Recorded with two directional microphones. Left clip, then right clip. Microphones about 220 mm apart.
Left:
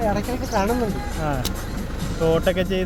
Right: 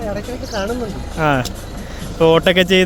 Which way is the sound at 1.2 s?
35° right (ahead or behind).